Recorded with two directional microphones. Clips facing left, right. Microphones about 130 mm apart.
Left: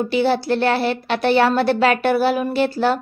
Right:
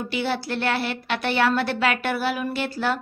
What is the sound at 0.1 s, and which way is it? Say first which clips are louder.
A woman's voice: left 7 dB; 35° left (ahead or behind).